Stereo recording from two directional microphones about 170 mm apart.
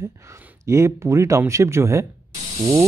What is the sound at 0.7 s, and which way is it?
Speech, 15° right (ahead or behind).